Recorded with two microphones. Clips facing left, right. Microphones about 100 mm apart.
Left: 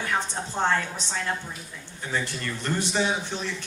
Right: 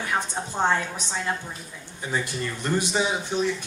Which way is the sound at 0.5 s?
15° right (ahead or behind).